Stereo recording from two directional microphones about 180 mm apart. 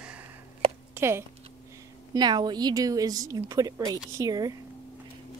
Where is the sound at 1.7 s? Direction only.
20° right (ahead or behind).